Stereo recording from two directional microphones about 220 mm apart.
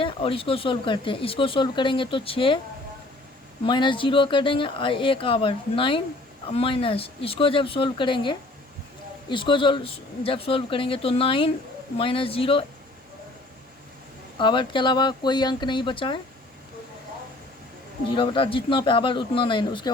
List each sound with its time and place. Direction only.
0.0 s speech: 25° left (ahead or behind)
3.6 s speech: 20° left (ahead or behind)
14.3 s speech: 20° left (ahead or behind)
18.1 s speech: 20° left (ahead or behind)